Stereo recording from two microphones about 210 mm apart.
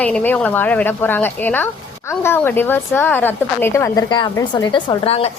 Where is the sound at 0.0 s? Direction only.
5° left (ahead or behind).